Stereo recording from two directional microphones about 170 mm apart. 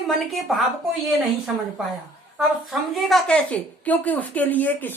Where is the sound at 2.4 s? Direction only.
Centre (ahead or behind).